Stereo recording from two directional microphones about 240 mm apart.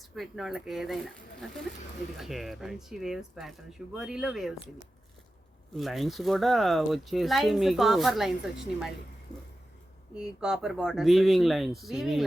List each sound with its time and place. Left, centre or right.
0.0 s speech: centre
5.7 s speech: centre
9.3 s a sound: centre
10.2 s speech: centre